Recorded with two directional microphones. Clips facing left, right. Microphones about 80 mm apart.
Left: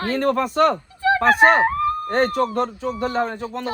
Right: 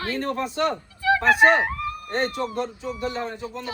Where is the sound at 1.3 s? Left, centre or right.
Left.